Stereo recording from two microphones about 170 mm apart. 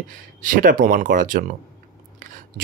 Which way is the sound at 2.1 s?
50° right (ahead or behind).